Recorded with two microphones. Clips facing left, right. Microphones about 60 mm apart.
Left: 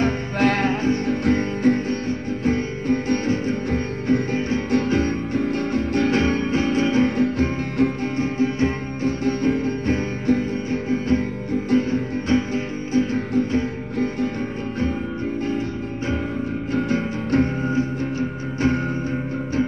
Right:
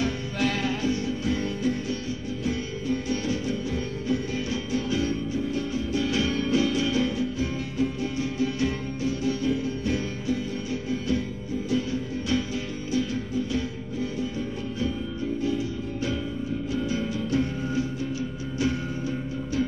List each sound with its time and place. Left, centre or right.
0.0 s music: left
16.7 s music: left